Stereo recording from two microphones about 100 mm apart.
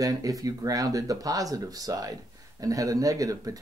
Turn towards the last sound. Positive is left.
turn(degrees=-35)  # may be behind; listen again after turning